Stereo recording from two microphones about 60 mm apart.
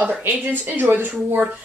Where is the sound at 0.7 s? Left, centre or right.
Right.